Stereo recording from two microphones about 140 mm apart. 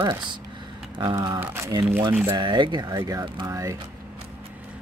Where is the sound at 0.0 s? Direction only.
30° right (ahead or behind).